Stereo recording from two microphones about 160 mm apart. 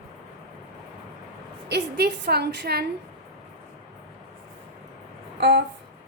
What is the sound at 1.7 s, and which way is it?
A woman's voice, 90° right.